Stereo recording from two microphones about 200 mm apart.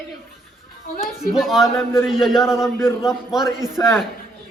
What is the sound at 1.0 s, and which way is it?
Speech, centre (ahead or behind).